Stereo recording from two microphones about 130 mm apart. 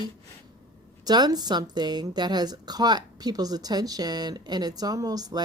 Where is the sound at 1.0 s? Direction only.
30° right (ahead or behind).